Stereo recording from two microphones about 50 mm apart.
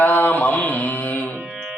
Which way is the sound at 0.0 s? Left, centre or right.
Left.